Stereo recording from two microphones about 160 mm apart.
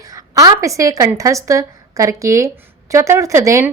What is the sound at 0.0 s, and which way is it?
A woman's voice, 20° right (ahead or behind).